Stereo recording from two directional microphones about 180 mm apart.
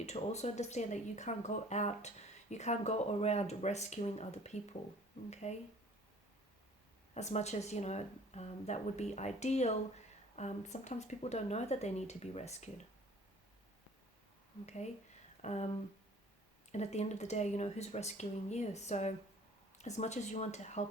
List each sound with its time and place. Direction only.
0.0 s speech: 40° left (ahead or behind)
7.1 s speech: 40° left (ahead or behind)
15.4 s a sound: 35° left (ahead or behind)
16.7 s speech: 40° left (ahead or behind)